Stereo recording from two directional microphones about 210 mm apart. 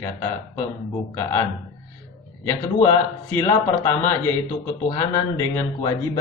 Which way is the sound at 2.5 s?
15° left (ahead or behind).